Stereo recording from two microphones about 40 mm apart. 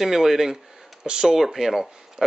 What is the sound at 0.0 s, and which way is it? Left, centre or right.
Speech, centre.